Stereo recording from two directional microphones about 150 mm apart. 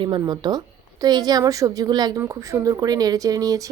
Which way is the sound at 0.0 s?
30° right (ahead or behind).